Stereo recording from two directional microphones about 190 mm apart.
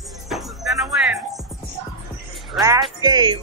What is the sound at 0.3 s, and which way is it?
Music, centre (ahead or behind).